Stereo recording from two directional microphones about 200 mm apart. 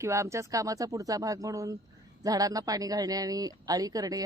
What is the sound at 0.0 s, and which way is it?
Speech, 15° right (ahead or behind).